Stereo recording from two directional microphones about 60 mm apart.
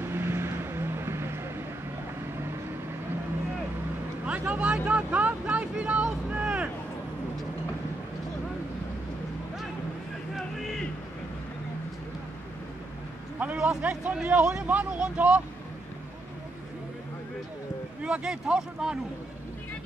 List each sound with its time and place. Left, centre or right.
0.1 s vehicle: right
4.3 s vehicle: right
13.6 s speech: centre
18.0 s speech: centre